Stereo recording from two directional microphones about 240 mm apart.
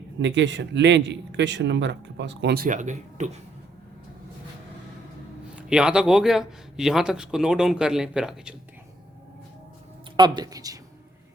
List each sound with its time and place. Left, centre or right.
0.2 s speech: right
5.5 s a man's voice: centre
10.2 s speech: centre